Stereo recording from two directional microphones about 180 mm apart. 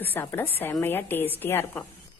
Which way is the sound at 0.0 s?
10° left (ahead or behind).